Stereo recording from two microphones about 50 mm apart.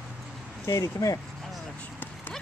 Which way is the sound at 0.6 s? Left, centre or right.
Left.